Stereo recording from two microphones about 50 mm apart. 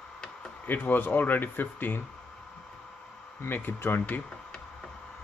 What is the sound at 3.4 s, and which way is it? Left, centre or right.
Speech, left.